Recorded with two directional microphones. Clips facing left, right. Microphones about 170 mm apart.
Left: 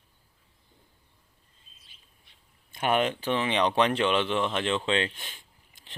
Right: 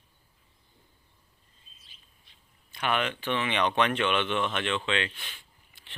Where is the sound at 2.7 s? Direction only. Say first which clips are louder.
Left 4 dB; 40° left (ahead or behind).